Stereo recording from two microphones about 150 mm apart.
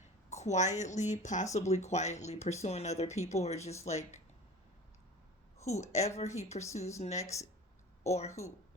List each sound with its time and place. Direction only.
0.3 s speech: 50° left (ahead or behind)
5.5 s speech: 50° left (ahead or behind)